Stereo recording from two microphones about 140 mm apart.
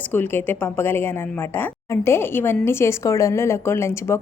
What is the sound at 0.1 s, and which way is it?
Speech, 15° left (ahead or behind).